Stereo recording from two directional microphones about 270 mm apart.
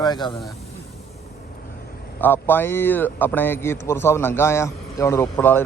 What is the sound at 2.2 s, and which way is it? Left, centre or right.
Speech, centre.